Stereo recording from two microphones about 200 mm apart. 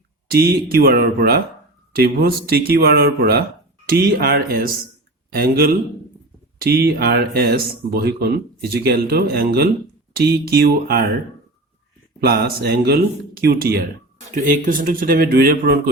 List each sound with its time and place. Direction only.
0.3 s speech: 50° right (ahead or behind)
12.2 s speech: 50° right (ahead or behind)